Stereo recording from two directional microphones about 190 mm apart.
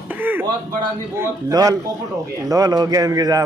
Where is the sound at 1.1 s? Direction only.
15° right (ahead or behind).